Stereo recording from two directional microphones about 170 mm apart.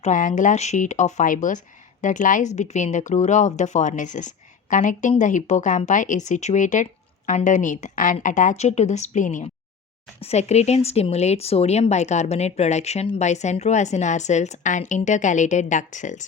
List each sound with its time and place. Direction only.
0.0 s speech: 50° left (ahead or behind)